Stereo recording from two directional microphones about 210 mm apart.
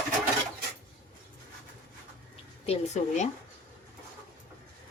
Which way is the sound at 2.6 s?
30° left (ahead or behind).